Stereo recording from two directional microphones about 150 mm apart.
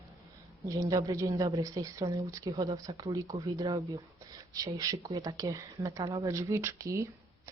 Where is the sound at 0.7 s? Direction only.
25° right (ahead or behind).